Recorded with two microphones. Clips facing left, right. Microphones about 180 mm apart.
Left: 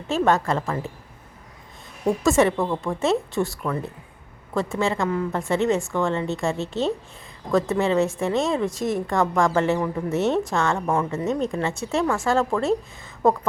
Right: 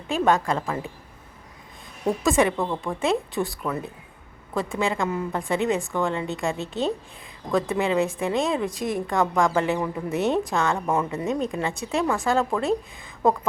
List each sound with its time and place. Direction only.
0.1 s a woman's voice: centre (ahead or behind)
2.0 s a woman's voice: centre (ahead or behind)